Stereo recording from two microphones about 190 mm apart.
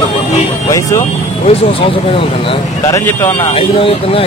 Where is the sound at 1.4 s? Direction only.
30° left (ahead or behind).